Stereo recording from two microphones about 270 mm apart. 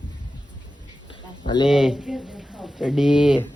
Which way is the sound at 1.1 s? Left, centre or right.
Centre.